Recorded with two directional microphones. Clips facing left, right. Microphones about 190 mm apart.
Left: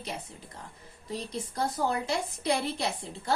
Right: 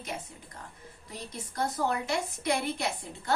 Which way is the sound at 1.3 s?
25° left (ahead or behind).